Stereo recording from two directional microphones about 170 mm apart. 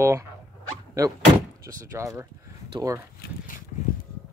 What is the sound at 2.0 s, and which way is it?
Speech, 15° right (ahead or behind).